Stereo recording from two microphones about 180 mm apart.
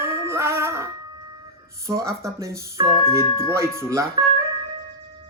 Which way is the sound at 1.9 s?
15° right (ahead or behind).